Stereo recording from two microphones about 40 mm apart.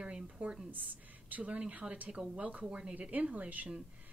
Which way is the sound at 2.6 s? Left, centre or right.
Right.